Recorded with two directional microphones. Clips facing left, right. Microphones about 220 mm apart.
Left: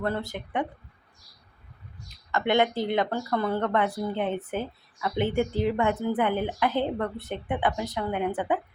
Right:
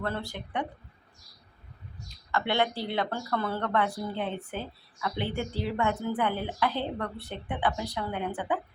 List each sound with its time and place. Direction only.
0.0 s speech: 20° left (ahead or behind)
2.3 s a woman's voice: 20° left (ahead or behind)